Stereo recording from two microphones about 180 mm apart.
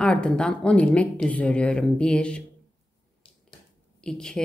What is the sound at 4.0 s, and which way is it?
Speech, 5° left (ahead or behind).